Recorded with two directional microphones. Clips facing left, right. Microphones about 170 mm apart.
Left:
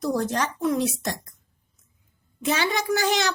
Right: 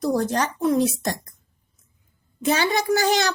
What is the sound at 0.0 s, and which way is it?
Speech, 35° right (ahead or behind).